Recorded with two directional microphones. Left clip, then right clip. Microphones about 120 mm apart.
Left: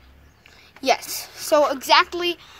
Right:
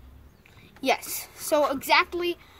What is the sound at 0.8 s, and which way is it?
A woman's voice, 20° right (ahead or behind).